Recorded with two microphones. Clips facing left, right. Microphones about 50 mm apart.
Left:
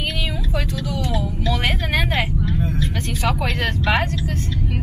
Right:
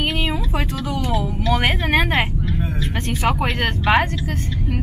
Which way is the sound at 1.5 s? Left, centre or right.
Right.